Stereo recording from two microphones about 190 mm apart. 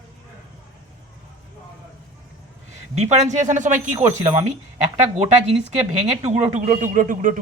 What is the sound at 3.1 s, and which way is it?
Speech, 40° right (ahead or behind).